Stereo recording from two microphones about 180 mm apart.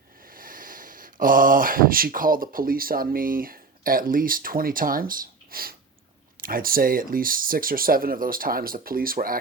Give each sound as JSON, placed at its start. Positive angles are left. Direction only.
{"t": 0.3, "sound": "speech", "side_deg": -50}